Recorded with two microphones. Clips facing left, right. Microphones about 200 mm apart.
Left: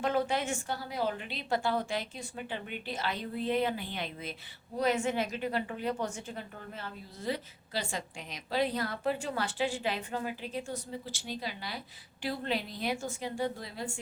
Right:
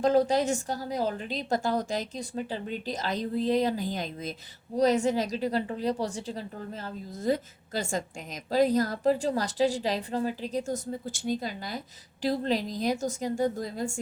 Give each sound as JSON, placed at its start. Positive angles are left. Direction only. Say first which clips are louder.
{"t": 0.0, "sound": "a woman's voice", "louder": "right 7 dB", "side_deg": -40}